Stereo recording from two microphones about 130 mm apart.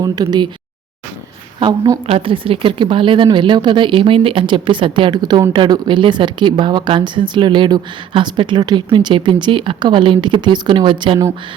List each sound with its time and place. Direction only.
0.0 s speech: 30° right (ahead or behind)
1.5 s speech: 35° right (ahead or behind)
2.0 s speech: 45° right (ahead or behind)